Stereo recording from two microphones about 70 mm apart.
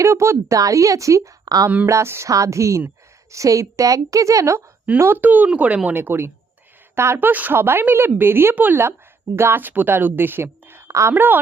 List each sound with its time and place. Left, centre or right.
0.0 s a woman's voice: right
1.9 s a woman's voice: right
4.9 s speech: right
5.2 s speech: right
5.9 s a woman's voice: right
7.2 s a woman's voice: right
11.1 s speech: right